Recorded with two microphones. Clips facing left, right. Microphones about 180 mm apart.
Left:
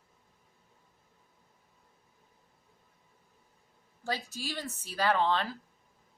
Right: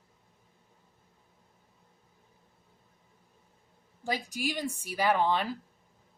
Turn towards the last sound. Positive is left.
turn(degrees=-15)  # may be behind; listen again after turning